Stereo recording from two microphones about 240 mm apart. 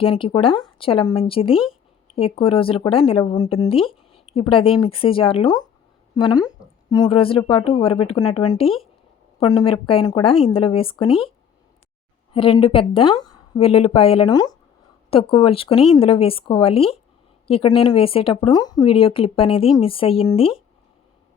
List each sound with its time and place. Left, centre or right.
0.0 s a woman's voice: left
12.3 s speech: left